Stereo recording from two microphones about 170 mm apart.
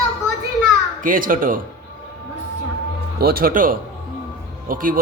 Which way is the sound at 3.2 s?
60° right (ahead or behind).